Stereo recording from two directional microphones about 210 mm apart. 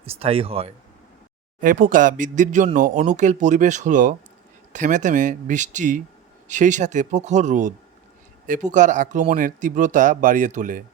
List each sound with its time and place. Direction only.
0.0 s speech: 30° right (ahead or behind)
1.6 s speech: 40° right (ahead or behind)